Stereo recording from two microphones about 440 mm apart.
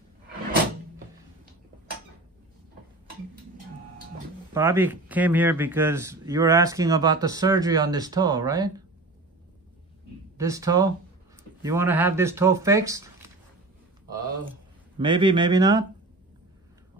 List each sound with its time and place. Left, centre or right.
4.6 s speech: centre
10.3 s speech: centre
15.0 s speech: centre